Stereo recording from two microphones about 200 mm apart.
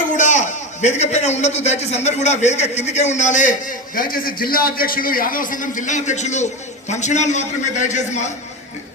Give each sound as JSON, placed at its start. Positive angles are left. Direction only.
{"t": 0.1, "sound": "a man's voice", "side_deg": 40}